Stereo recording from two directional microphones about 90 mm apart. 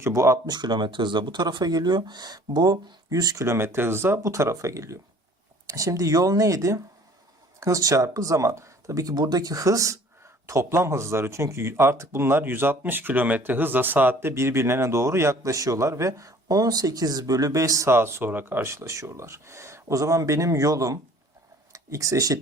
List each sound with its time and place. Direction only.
0.0 s speech: 35° right (ahead or behind)
0.4 s speech: 50° right (ahead or behind)